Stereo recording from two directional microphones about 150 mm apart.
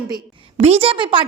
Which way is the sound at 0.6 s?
40° right (ahead or behind).